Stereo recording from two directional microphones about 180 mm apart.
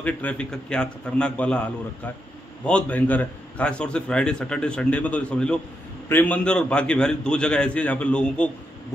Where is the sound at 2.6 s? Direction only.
5° left (ahead or behind).